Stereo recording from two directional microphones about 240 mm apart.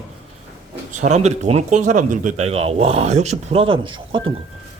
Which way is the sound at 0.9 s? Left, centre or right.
Right.